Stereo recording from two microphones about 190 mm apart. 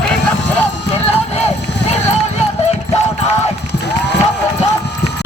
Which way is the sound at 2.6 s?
35° left (ahead or behind).